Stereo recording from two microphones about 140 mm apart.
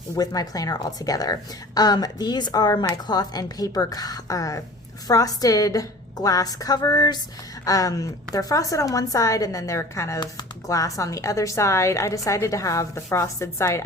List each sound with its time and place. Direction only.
0.2 s a woman's voice: 25° left (ahead or behind)